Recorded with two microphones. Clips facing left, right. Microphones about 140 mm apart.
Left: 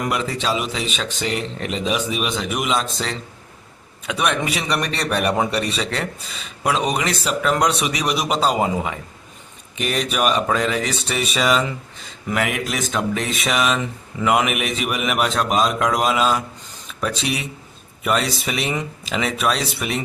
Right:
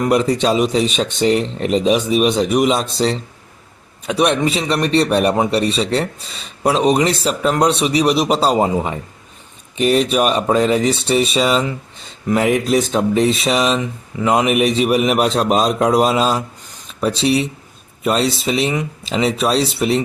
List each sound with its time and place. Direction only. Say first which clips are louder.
0.0 s a man's voice: right 8 dB; 35° right (ahead or behind)